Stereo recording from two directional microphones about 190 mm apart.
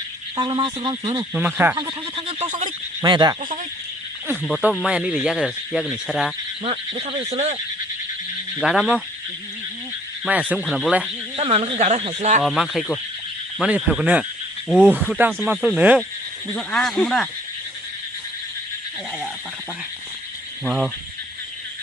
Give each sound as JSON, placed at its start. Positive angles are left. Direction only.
{"t": 0.3, "sound": "speech", "side_deg": -25}
{"t": 1.3, "sound": "speech", "side_deg": -10}
{"t": 1.7, "sound": "speech", "side_deg": -25}
{"t": 2.6, "sound": "speech", "side_deg": -25}
{"t": 4.3, "sound": "speech", "side_deg": -5}
{"t": 6.7, "sound": "speech", "side_deg": -30}
{"t": 8.5, "sound": "speech", "side_deg": 0}
{"t": 10.2, "sound": "speech", "side_deg": -5}
{"t": 11.3, "sound": "speech", "side_deg": -30}
{"t": 12.4, "sound": "speech", "side_deg": 0}
{"t": 20.7, "sound": "speech", "side_deg": -5}